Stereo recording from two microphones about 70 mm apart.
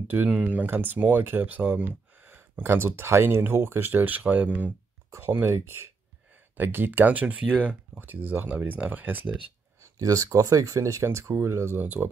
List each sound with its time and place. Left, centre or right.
0.1 s speech: centre
5.3 s speech: right
9.9 s speech: right